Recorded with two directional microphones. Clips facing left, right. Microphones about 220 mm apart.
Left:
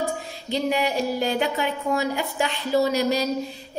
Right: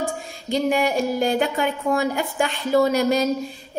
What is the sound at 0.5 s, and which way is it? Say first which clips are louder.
A woman's voice: right 3 dB; 50° right (ahead or behind).